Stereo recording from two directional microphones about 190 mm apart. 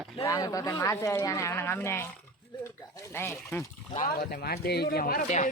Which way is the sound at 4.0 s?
50° left (ahead or behind).